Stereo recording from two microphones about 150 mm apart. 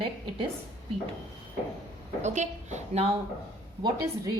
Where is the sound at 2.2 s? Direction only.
50° right (ahead or behind).